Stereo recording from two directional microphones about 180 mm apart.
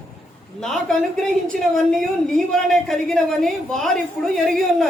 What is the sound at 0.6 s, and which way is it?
A woman's voice, 5° left (ahead or behind).